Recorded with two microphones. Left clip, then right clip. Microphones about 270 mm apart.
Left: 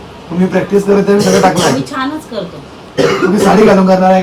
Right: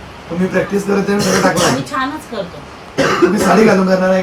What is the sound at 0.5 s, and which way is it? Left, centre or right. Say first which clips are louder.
Speech: left 6 dB; centre.